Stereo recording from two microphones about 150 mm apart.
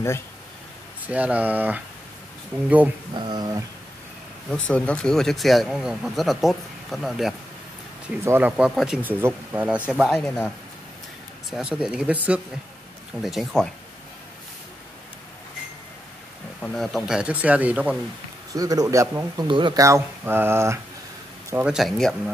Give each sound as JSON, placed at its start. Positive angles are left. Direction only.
{"t": 1.0, "sound": "speech", "side_deg": -10}
{"t": 3.2, "sound": "a sound", "side_deg": -30}
{"t": 4.5, "sound": "speech", "side_deg": 5}
{"t": 8.2, "sound": "speech", "side_deg": -15}
{"t": 10.1, "sound": "speech", "side_deg": 5}
{"t": 11.5, "sound": "speech", "side_deg": -5}
{"t": 16.6, "sound": "speech", "side_deg": 0}
{"t": 18.5, "sound": "speech", "side_deg": -25}
{"t": 19.4, "sound": "speech", "side_deg": -30}
{"t": 19.8, "sound": "speech", "side_deg": -15}
{"t": 21.7, "sound": "speech", "side_deg": 0}